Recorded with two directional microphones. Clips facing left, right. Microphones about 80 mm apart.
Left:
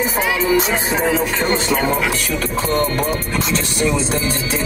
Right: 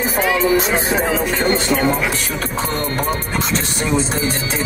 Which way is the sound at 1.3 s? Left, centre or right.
Right.